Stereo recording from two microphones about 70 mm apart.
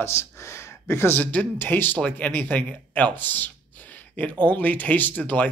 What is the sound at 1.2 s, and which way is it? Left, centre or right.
A man's voice, left.